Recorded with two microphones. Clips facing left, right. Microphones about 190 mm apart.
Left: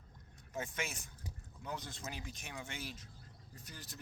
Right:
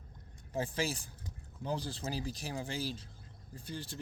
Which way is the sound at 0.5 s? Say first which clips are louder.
Right 7 dB; 30° right (ahead or behind).